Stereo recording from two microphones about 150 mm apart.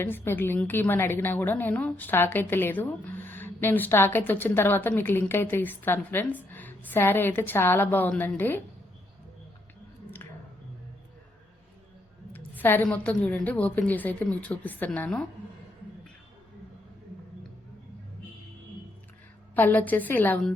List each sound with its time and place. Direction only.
0.0 s a woman's voice: 15° left (ahead or behind)
12.3 s a woman's voice: 10° left (ahead or behind)
19.5 s a woman's voice: 10° left (ahead or behind)